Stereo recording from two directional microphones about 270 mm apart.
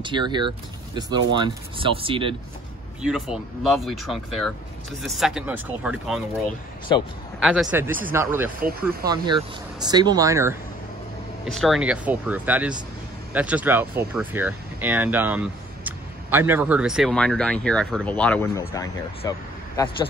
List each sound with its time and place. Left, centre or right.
0.0 s speech: centre
3.0 s speech: centre
6.9 s speech: centre
7.6 s speech: centre
11.5 s speech: centre